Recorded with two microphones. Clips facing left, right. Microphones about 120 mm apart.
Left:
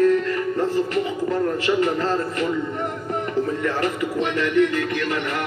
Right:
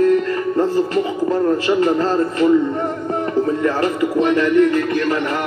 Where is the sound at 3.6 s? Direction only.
40° right (ahead or behind).